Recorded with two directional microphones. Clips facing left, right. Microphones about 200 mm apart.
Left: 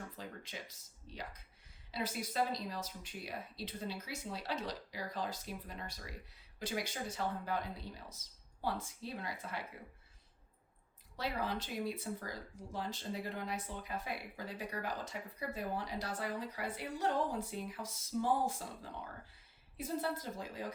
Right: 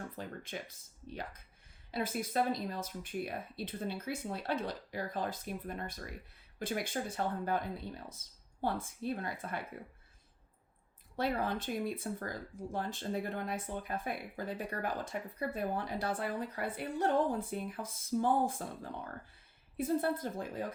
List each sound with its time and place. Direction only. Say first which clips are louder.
0.2 s speech: right 5 dB; 55° right (ahead or behind)
11.2 s speech: right 5 dB; 50° right (ahead or behind)